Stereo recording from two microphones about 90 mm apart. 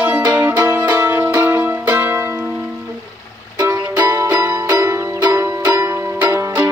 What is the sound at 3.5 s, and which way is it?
Music, 40° right (ahead or behind).